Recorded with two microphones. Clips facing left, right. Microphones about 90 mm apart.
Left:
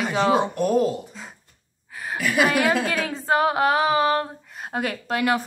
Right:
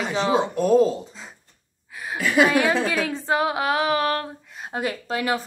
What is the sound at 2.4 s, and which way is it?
Speech, 20° right (ahead or behind).